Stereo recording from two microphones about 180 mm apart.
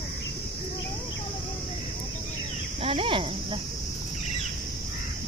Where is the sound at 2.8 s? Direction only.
30° right (ahead or behind).